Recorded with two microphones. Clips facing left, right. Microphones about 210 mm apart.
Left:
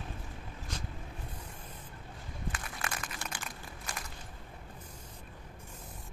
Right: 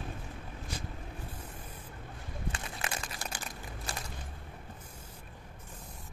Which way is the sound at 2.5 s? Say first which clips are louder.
Right 1 dB; 25° right (ahead or behind).